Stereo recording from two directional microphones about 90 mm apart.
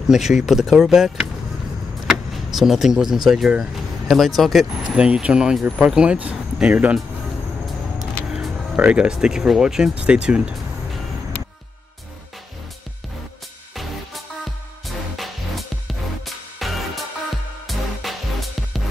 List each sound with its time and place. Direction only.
0.1 s speech: 5° right (ahead or behind)
8.3 s speech: 10° right (ahead or behind)
15.1 s music: centre (ahead or behind)